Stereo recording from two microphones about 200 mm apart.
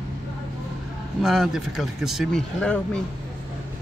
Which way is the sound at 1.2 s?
Centre (ahead or behind).